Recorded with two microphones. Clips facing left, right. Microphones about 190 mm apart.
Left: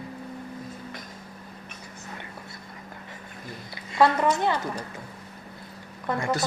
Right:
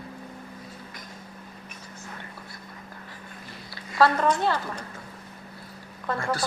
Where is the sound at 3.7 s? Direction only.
15° left (ahead or behind).